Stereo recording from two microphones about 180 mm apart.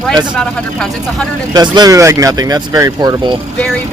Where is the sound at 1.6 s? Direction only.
20° right (ahead or behind).